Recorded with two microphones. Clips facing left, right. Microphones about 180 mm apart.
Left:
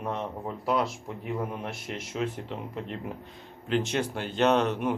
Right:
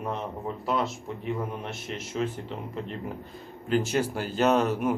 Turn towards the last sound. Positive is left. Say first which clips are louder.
# right 1 dB
turn(degrees=-5)  # may be behind; listen again after turning